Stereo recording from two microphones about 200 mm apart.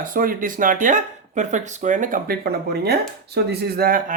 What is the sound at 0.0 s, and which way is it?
Speech, 45° right (ahead or behind).